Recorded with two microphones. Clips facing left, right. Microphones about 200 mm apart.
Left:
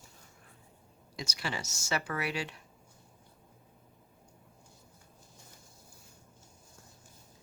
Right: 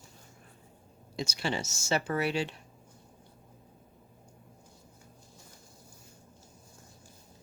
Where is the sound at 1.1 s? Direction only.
25° right (ahead or behind).